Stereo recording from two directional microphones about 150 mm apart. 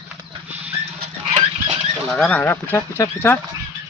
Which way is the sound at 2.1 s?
5° left (ahead or behind).